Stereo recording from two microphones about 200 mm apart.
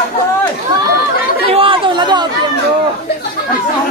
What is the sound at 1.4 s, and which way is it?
Chatter, 25° right (ahead or behind).